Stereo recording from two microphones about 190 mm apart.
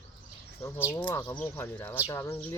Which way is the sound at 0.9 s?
15° left (ahead or behind).